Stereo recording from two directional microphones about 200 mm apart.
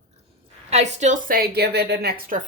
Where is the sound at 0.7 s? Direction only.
35° right (ahead or behind); by 2.4 s 50° right (ahead or behind).